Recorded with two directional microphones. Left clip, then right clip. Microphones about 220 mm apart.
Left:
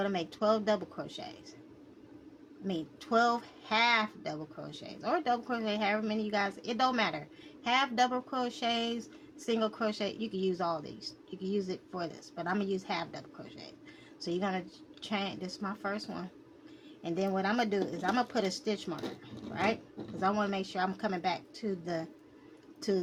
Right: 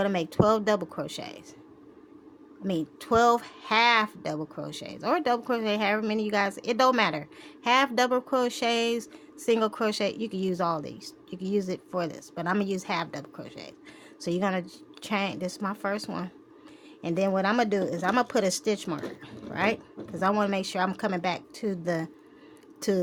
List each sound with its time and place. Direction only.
0.0 s speech: 55° right (ahead or behind)
2.6 s speech: 55° right (ahead or behind)